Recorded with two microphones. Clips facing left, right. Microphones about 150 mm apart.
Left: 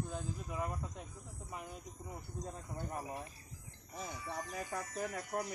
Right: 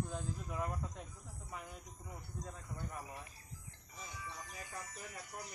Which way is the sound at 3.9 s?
60° left (ahead or behind).